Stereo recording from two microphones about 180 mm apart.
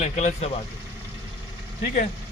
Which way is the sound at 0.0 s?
40° left (ahead or behind).